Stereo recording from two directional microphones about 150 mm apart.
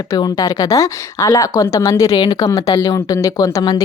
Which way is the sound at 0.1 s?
25° left (ahead or behind).